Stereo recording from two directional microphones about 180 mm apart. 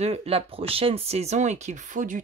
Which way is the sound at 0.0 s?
35° right (ahead or behind).